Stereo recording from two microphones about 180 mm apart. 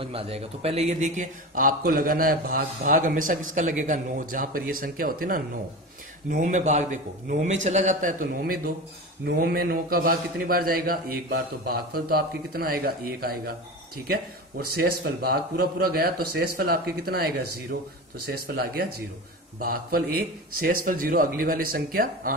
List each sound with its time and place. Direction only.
0.0 s a man's voice: 30° right (ahead or behind); by 22.3 s 50° right (ahead or behind)